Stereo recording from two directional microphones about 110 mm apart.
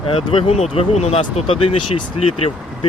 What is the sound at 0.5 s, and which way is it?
Speech, 80° left.